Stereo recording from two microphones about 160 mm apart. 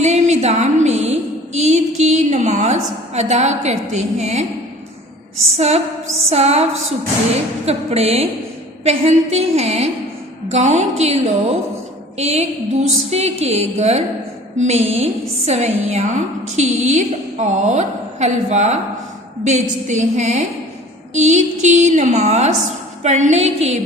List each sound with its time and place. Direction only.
0.0 s music: 45° right (ahead or behind)
5.5 s a sound: 40° right (ahead or behind)
10.5 s a woman's voice: 45° right (ahead or behind)